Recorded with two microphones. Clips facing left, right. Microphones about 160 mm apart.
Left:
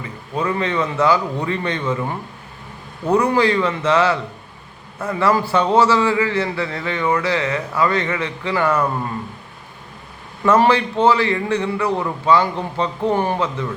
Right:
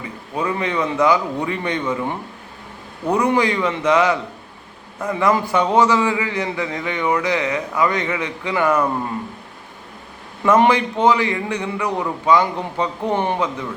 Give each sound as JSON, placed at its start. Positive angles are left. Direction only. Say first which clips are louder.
{"t": 0.3, "sound": "a man's voice", "louder": "left 1 dB", "side_deg": -15}
{"t": 10.4, "sound": "a man's voice", "louder": "even", "side_deg": -15}